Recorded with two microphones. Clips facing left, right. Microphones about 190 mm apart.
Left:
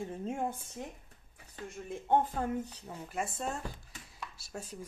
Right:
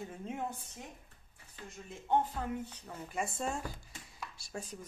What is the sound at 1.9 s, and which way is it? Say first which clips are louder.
Speech: left 3 dB; 55° left (ahead or behind).